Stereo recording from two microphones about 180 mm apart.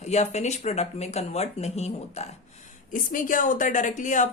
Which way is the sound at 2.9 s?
50° left (ahead or behind).